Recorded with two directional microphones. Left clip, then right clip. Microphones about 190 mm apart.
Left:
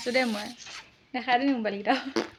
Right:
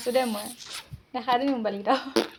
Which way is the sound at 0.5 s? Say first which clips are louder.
Right 3 dB; 15° right (ahead or behind).